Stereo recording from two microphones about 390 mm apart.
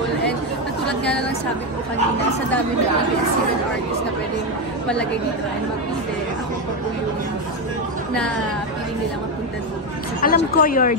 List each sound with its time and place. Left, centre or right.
10.2 s speech: left